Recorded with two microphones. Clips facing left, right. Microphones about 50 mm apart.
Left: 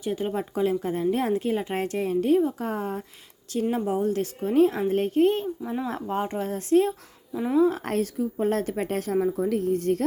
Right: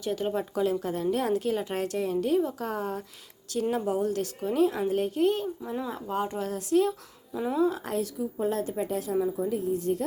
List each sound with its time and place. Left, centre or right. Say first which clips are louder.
0.0 s speech: left 1 dB; left
4.0 s speech: left 3 dB; left
7.3 s speech: left 5 dB; centre
7.6 s a woman's voice: left 3 dB; left